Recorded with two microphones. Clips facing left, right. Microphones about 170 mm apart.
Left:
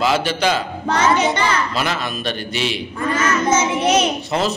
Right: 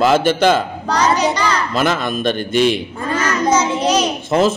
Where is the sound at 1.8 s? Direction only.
50° right (ahead or behind).